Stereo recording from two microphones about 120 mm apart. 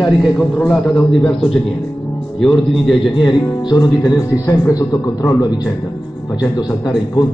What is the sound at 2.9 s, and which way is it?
Speech, 45° left (ahead or behind).